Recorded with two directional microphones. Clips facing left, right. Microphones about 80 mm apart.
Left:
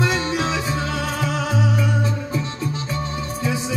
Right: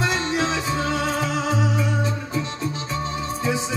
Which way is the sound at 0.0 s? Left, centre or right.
Right.